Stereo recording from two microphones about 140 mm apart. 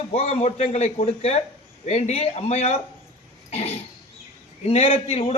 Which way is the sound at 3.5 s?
50° left (ahead or behind).